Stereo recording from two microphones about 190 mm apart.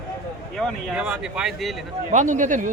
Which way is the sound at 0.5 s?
5° left (ahead or behind).